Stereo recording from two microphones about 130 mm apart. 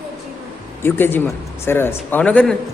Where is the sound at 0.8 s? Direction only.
15° left (ahead or behind).